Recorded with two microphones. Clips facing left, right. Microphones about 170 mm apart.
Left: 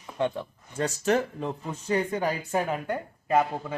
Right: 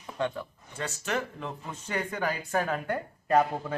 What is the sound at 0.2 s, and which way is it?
Speech, 20° left (ahead or behind).